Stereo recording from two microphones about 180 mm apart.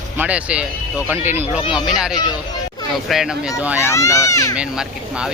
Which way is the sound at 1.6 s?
25° left (ahead or behind).